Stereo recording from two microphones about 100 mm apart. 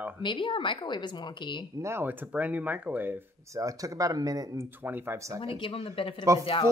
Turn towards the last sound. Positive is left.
turn(degrees=-30)  # may be behind; listen again after turning